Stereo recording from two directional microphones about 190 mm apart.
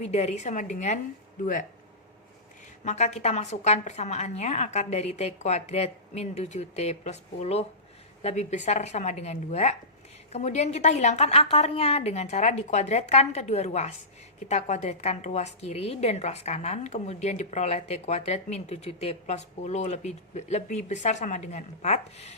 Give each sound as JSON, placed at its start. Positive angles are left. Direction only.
{"t": 0.0, "sound": "a woman's voice", "side_deg": 35}
{"t": 2.8, "sound": "a woman's voice", "side_deg": 35}